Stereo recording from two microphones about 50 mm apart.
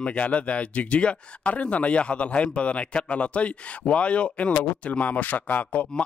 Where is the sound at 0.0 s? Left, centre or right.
Left.